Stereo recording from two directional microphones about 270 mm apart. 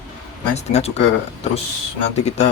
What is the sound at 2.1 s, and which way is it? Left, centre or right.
Speech, left.